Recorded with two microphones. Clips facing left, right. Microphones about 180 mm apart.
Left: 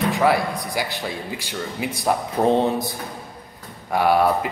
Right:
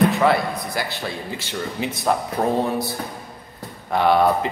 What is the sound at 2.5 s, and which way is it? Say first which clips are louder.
Speech: left 3 dB; 25° left (ahead or behind).